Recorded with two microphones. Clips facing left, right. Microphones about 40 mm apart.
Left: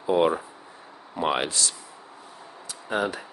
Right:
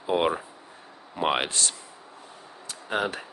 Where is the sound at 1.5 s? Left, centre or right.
Right.